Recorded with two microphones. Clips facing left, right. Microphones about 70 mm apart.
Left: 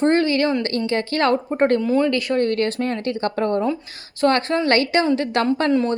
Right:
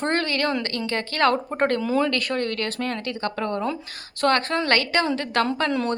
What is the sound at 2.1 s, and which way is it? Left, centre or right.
Speech, centre.